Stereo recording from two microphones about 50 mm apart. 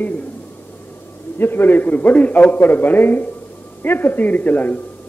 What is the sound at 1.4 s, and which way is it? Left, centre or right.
A man's voice, left.